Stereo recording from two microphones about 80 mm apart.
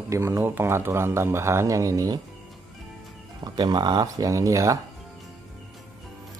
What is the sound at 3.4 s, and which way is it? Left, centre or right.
Speech, right.